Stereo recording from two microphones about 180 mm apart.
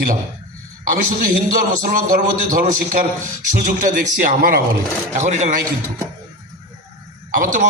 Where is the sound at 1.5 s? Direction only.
50° right (ahead or behind).